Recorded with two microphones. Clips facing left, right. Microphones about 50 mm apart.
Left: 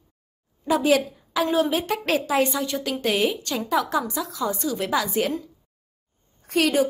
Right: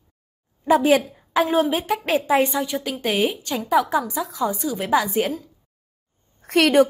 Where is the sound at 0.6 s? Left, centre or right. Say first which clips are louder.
Right 3 dB; right.